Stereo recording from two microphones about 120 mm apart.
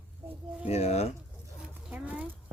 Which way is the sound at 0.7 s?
60° left (ahead or behind).